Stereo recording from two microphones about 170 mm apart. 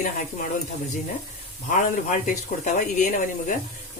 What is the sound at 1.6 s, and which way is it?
Speech, 50° left (ahead or behind).